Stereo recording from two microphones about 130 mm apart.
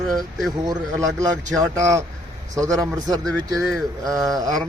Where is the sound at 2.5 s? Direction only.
25° right (ahead or behind).